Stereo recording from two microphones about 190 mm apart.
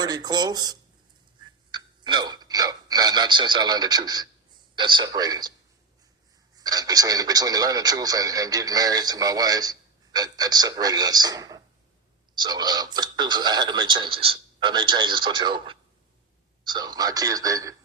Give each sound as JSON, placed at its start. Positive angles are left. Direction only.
{"t": 0.0, "sound": "speech", "side_deg": -20}
{"t": 1.7, "sound": "a sound", "side_deg": -25}
{"t": 4.7, "sound": "speech", "side_deg": -25}
{"t": 6.6, "sound": "speech", "side_deg": -20}